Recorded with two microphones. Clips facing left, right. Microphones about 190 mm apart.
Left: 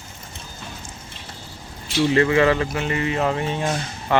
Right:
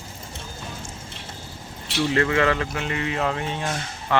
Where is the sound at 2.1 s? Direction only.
10° left (ahead or behind).